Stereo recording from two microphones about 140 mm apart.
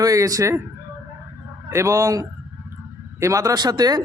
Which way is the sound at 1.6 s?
20° right (ahead or behind).